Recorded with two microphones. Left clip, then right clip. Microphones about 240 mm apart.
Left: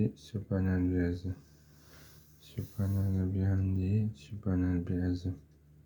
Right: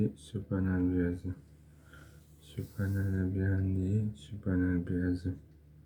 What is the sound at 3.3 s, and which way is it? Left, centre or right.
Speech, centre.